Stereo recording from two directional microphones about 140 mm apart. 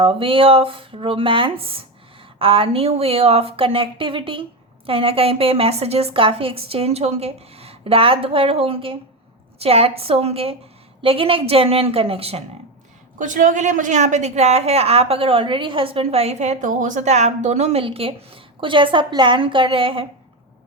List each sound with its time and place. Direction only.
0.0 s a woman's voice: 40° right (ahead or behind)
13.1 s a woman's voice: 65° right (ahead or behind); by 20.1 s 40° right (ahead or behind)